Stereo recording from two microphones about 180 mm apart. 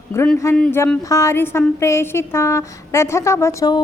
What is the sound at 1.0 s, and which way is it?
A woman's voice, 15° left (ahead or behind).